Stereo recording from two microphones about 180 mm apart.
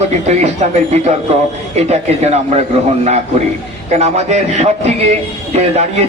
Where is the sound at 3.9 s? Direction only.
40° right (ahead or behind).